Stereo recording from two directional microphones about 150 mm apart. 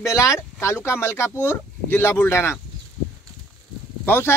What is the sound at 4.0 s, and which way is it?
Speech, 15° left (ahead or behind).